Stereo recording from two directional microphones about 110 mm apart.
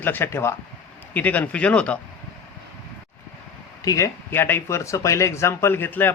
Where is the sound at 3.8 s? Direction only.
30° left (ahead or behind).